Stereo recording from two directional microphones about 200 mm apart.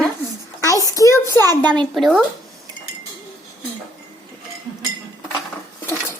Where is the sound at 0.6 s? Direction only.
15° left (ahead or behind).